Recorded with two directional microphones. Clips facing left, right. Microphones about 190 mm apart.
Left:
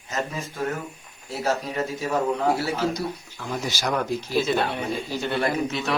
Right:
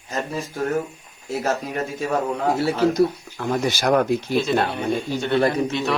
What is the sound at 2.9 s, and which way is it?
Speech, 55° right (ahead or behind).